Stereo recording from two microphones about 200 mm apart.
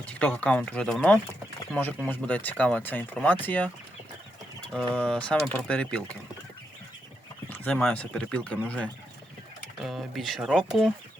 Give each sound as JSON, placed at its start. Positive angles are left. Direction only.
{"t": 0.0, "sound": "speech", "side_deg": 5}
{"t": 4.7, "sound": "speech", "side_deg": 5}
{"t": 7.5, "sound": "speech", "side_deg": 5}